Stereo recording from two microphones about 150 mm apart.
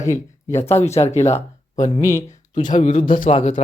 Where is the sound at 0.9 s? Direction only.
45° left (ahead or behind).